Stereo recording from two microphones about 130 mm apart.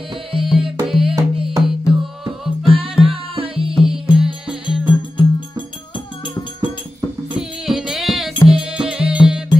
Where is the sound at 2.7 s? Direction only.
45° right (ahead or behind).